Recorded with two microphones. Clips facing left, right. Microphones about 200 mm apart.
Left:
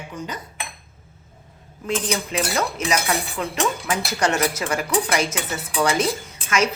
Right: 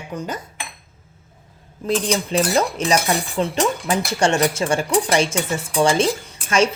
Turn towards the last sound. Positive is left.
turn(degrees=-30)  # may be behind; listen again after turning